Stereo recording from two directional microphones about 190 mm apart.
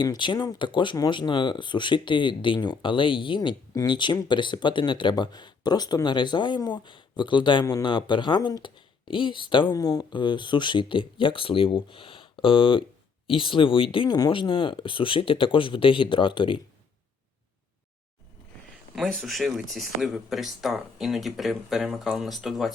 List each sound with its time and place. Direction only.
0.0 s speech: 25° left (ahead or behind)
18.9 s speech: centre (ahead or behind)